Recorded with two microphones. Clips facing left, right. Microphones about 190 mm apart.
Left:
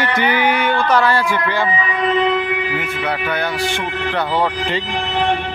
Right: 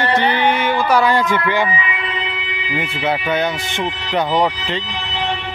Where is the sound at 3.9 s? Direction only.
55° left (ahead or behind).